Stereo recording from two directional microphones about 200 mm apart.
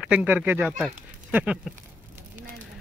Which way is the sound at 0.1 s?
5° right (ahead or behind).